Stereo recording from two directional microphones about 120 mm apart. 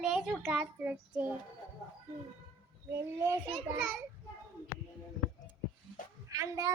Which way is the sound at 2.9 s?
20° right (ahead or behind).